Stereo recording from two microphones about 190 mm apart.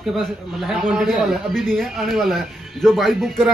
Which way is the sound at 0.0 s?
Centre (ahead or behind).